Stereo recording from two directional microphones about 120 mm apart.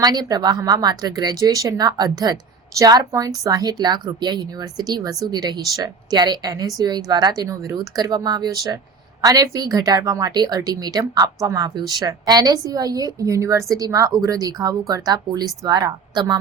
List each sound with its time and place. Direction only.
0.0 s a woman's voice: 35° right (ahead or behind)